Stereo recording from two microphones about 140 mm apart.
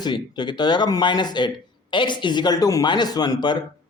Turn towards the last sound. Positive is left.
turn(degrees=30)  # may be behind; listen again after turning